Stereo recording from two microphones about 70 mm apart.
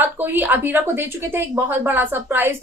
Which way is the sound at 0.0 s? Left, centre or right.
Right.